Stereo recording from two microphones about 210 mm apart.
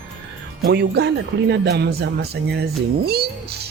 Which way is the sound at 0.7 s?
55° right (ahead or behind).